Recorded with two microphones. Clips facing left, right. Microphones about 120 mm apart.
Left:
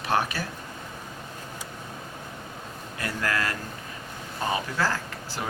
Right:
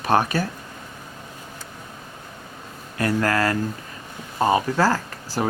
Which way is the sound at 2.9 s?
45° right (ahead or behind).